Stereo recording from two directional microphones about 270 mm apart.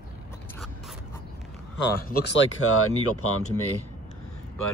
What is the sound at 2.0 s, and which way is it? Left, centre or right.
Speech, left.